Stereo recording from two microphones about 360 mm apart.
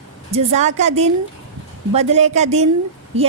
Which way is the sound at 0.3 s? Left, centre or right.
Centre.